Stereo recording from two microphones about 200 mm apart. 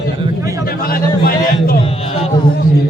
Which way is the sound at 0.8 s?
50° left (ahead or behind).